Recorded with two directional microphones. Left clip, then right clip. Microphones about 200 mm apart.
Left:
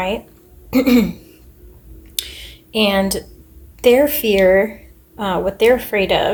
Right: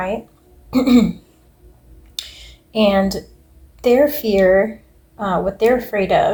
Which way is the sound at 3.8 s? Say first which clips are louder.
Left 1 dB; 40° left (ahead or behind).